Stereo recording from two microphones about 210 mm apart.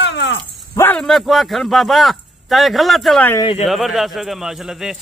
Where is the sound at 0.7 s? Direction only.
10° left (ahead or behind).